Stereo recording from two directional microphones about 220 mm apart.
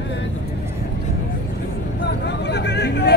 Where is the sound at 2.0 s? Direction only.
50° left (ahead or behind).